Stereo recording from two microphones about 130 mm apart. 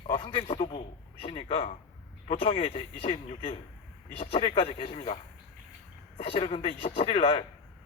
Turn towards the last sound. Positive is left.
turn(degrees=50)  # may be behind; listen again after turning